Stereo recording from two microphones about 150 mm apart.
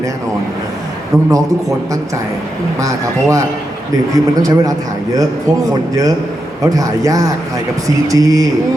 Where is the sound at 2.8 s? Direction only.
20° right (ahead or behind).